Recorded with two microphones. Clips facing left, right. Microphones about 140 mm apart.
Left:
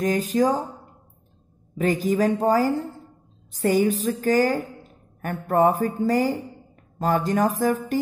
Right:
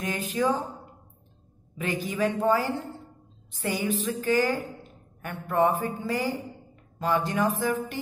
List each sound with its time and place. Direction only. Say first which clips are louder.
0.0 s speech: left 6 dB; 40° left (ahead or behind)
1.8 s speech: left 7 dB; 40° left (ahead or behind)